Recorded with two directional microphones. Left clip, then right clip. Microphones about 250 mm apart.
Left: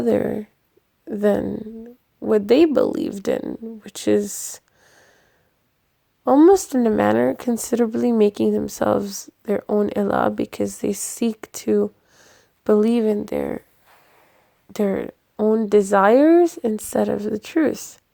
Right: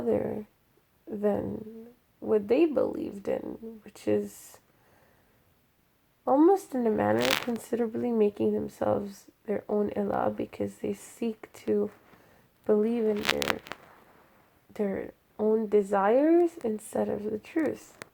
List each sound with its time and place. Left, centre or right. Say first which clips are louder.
0.0 s speech: left 8 dB; left
6.2 s speech: left 9 dB; left
14.7 s speech: left 9 dB; left